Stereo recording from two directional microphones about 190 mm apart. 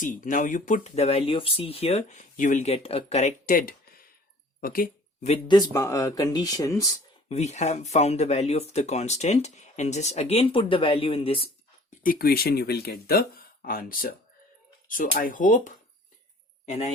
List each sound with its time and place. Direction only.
0.0 s speech: 45° left (ahead or behind)
5.2 s speech: 35° left (ahead or behind)
5.5 s speech: 15° left (ahead or behind)
7.3 s speech: 35° left (ahead or behind)
12.0 s speech: 50° left (ahead or behind); by 16.9 s 35° left (ahead or behind)